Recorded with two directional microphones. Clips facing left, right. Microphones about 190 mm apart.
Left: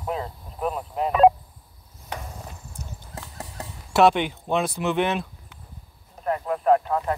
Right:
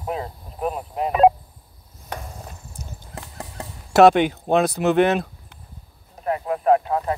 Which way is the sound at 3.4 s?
35° right (ahead or behind).